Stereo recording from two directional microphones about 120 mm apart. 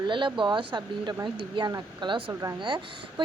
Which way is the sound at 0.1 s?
45° right (ahead or behind).